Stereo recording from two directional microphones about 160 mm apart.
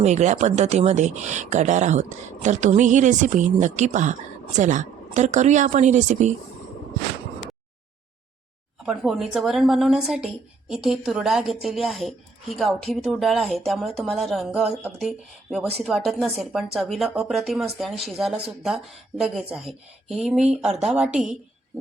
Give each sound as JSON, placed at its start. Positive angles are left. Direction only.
{"t": 0.0, "sound": "speech", "side_deg": -45}
{"t": 8.9, "sound": "a woman's voice", "side_deg": -5}